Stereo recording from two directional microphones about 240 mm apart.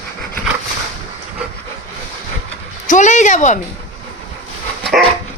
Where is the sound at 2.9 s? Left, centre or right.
Left.